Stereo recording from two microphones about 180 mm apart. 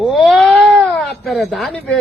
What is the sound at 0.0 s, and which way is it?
A man's voice, centre (ahead or behind).